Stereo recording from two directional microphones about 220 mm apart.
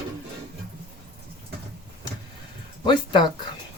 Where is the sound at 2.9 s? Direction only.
20° left (ahead or behind).